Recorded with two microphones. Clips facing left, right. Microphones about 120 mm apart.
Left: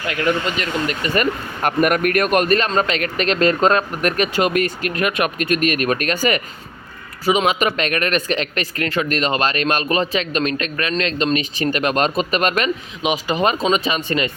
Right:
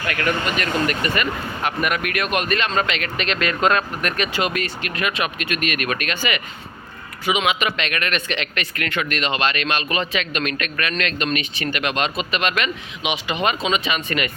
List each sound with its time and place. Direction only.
0.0 s speech: 20° left (ahead or behind)
1.1 s speech: 45° left (ahead or behind)